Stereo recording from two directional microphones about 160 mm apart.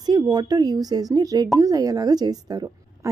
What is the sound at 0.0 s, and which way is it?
A woman's voice, 25° right (ahead or behind).